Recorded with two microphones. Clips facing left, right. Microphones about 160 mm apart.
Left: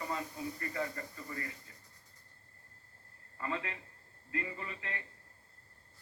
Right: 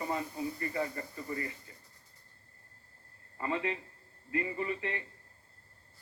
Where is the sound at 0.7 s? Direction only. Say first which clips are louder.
Right 3 dB; 25° right (ahead or behind).